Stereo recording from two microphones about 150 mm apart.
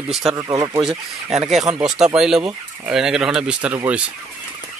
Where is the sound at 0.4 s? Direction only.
25° right (ahead or behind).